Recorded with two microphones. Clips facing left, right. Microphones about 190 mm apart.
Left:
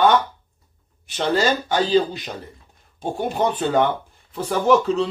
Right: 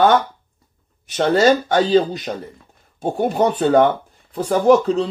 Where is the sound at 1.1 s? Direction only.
45° right (ahead or behind).